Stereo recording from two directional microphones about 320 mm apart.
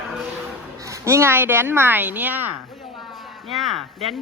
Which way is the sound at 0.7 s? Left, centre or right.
Centre.